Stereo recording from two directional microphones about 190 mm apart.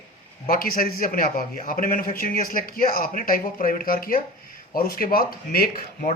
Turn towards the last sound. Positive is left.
turn(degrees=50)  # may be behind; listen again after turning